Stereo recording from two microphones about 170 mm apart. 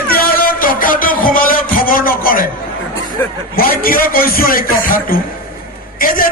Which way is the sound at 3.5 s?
60° left (ahead or behind).